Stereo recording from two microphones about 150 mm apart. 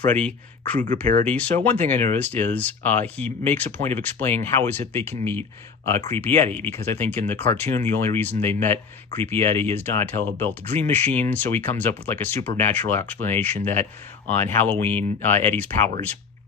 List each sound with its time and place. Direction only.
0.0 s speech: 10° left (ahead or behind)